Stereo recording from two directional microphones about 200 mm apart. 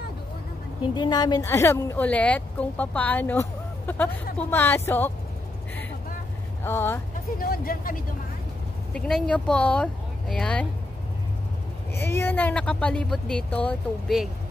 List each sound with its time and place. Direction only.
0.9 s speech: 20° left (ahead or behind)
6.6 s speech: 10° left (ahead or behind)
7.3 s speech: 45° left (ahead or behind)
8.9 s speech: 5° left (ahead or behind)
12.0 s speech: 10° left (ahead or behind)